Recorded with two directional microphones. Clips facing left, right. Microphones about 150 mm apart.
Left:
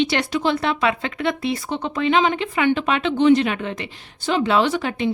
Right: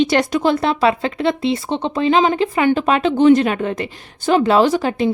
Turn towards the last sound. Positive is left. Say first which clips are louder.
# right 5 dB
turn(degrees=-35)  # may be behind; listen again after turning